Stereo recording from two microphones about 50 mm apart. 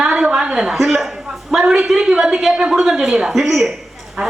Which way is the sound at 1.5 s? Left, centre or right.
Centre.